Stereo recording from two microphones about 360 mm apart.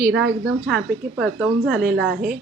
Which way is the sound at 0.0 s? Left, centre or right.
Centre.